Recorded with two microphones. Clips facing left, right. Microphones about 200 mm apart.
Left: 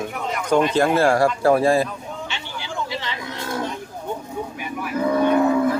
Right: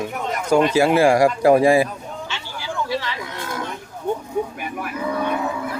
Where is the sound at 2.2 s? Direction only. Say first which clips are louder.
Right 1 dB; 20° left (ahead or behind).